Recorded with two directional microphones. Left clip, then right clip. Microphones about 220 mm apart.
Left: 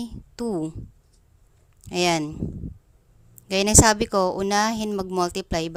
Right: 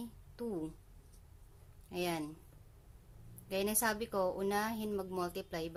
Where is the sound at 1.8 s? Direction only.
50° left (ahead or behind).